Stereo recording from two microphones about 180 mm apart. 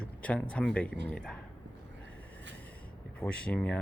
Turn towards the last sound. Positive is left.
turn(degrees=5)  # may be behind; listen again after turning